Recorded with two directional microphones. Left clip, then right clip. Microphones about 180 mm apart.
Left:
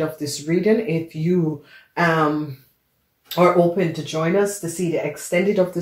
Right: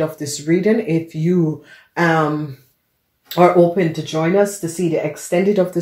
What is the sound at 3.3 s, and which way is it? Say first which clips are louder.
Speech: right 4 dB; 50° right (ahead or behind).